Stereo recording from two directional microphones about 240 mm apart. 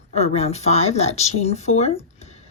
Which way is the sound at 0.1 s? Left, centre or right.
Left.